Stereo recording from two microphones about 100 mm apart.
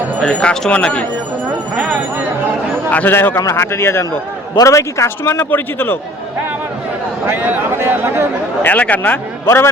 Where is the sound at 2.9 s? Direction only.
20° left (ahead or behind).